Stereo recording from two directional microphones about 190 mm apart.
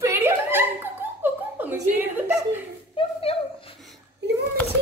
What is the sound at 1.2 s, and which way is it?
Laughter, 10° right (ahead or behind).